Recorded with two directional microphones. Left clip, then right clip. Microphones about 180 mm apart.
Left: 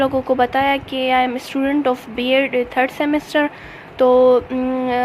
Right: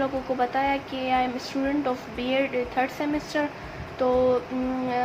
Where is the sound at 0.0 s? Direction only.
50° left (ahead or behind).